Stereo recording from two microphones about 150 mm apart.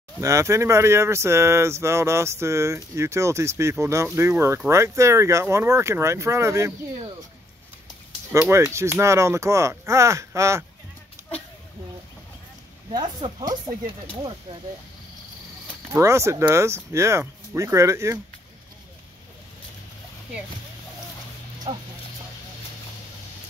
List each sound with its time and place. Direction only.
0.2 s speech: 20° right (ahead or behind)
8.3 s speech: 20° right (ahead or behind)
12.9 s speech: 30° right (ahead or behind)
15.9 s speech: 20° right (ahead or behind)
21.7 s speech: 30° right (ahead or behind)